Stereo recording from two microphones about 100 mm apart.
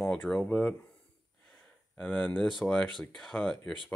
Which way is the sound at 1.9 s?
10° left (ahead or behind).